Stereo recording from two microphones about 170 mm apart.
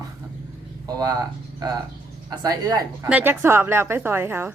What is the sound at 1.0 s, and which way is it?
A woman's voice, 25° right (ahead or behind).